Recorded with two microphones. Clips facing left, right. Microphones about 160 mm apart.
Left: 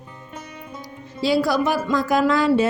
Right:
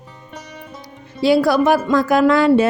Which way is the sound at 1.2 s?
60° right (ahead or behind).